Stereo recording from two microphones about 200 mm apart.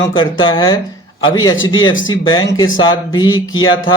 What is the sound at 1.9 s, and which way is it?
Speech, 75° left (ahead or behind).